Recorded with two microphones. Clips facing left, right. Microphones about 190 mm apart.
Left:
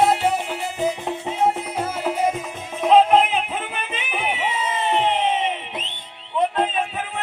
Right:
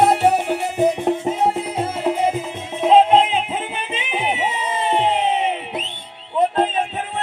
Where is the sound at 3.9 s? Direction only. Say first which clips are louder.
Right 4 dB; 25° right (ahead or behind).